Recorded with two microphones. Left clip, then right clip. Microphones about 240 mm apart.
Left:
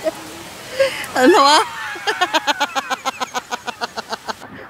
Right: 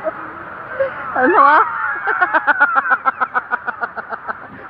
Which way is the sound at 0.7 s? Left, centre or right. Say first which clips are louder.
Left 1 dB; left.